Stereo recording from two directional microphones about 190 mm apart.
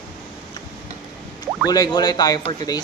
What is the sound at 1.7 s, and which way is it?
Speech, 20° left (ahead or behind).